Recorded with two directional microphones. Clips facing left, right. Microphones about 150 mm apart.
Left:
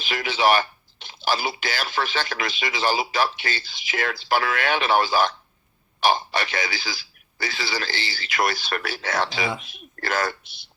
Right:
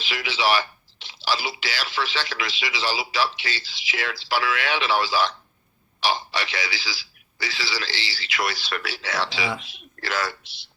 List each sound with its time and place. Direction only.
0.0 s speech: 50° left (ahead or behind)